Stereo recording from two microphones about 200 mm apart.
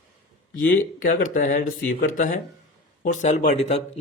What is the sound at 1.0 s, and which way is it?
A man's voice, 45° left (ahead or behind).